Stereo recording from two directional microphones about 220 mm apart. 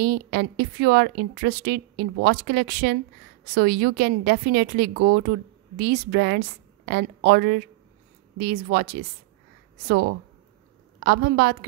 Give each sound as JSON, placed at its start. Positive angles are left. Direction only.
{"t": 0.0, "sound": "a woman's voice", "side_deg": -45}
{"t": 11.1, "sound": "a woman's voice", "side_deg": -45}